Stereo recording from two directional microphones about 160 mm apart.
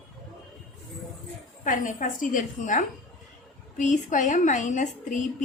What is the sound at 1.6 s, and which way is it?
A man's voice, 55° left (ahead or behind).